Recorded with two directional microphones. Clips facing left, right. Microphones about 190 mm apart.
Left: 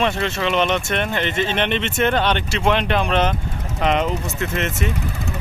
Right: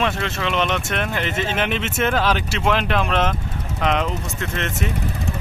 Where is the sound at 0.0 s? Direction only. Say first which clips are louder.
Left 2 dB; centre (ahead or behind).